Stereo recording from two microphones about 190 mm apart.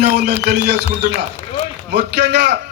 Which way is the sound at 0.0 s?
60° right (ahead or behind).